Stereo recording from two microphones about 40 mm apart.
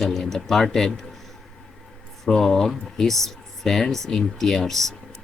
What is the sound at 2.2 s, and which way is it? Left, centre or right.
Speech, centre.